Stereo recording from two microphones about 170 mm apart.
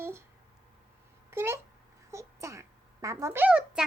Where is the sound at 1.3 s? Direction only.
15° right (ahead or behind).